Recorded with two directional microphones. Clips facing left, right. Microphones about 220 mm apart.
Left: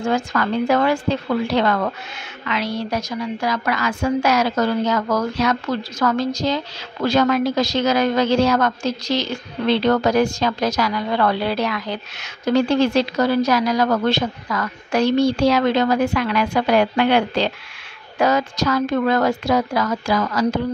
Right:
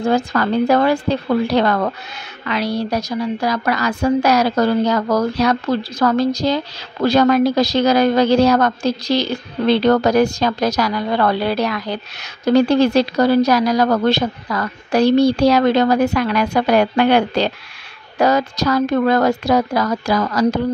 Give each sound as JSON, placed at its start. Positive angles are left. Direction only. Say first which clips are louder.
{"t": 0.0, "sound": "a woman's voice", "louder": "right 4 dB", "side_deg": -35}